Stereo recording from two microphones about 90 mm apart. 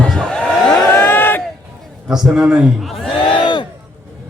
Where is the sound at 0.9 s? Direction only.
25° left (ahead or behind).